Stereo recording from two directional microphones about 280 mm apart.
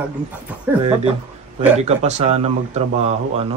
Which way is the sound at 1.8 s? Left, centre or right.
Right.